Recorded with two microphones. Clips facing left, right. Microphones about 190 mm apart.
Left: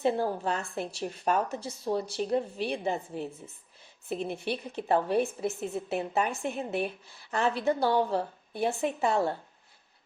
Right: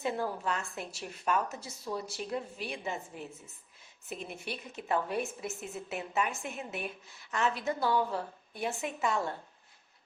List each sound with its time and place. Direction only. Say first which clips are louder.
0.0 s a woman's voice: left 6 dB; 30° left (ahead or behind)